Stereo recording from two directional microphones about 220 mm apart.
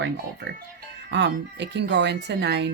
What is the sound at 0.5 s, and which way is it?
Speech, 50° right (ahead or behind).